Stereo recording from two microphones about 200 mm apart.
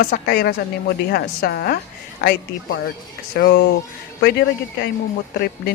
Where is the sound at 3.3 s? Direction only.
50° left (ahead or behind).